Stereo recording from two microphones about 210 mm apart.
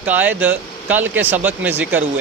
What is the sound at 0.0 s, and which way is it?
Speech, 10° right (ahead or behind).